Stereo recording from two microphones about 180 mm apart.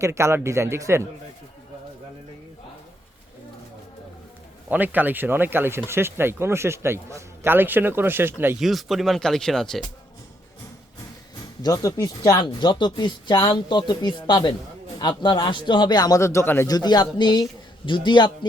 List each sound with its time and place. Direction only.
0.0 s a man's voice: 15° right (ahead or behind)
4.7 s a man's voice: 10° right (ahead or behind)
8.5 s speech: centre (ahead or behind)
11.6 s speech: 20° left (ahead or behind)